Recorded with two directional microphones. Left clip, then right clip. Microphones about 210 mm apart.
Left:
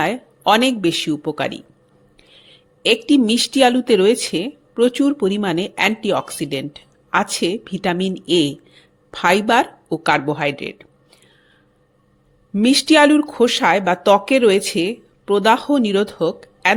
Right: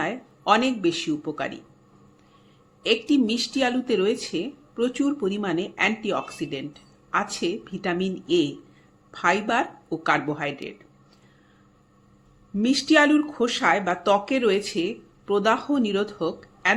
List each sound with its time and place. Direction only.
0.0 s speech: 40° left (ahead or behind)
12.5 s speech: 40° left (ahead or behind)